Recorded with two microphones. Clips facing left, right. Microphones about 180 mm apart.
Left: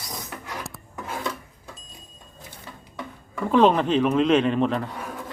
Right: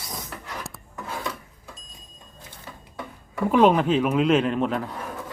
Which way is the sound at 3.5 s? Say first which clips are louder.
Even; 10° right (ahead or behind).